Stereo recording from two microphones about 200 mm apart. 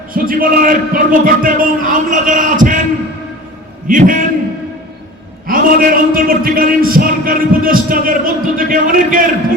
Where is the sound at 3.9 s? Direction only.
40° right (ahead or behind).